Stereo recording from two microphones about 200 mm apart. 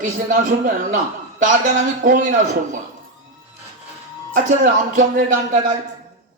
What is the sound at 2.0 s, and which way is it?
Speech, 40° right (ahead or behind).